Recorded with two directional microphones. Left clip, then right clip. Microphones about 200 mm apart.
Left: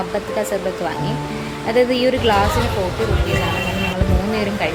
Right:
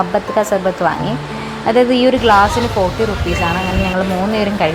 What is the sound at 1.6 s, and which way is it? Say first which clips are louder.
Speech: right 4 dB; 10° right (ahead or behind).